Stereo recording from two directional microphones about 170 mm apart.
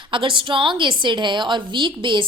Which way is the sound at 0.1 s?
30° right (ahead or behind).